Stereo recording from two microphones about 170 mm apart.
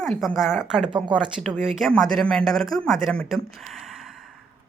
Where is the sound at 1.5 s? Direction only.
5° right (ahead or behind).